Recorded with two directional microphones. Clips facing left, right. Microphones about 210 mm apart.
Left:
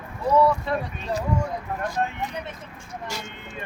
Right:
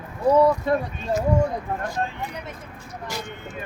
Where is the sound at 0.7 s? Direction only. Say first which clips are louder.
Right 5 dB; 50° right (ahead or behind).